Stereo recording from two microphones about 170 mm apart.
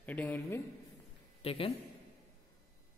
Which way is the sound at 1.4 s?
35° left (ahead or behind).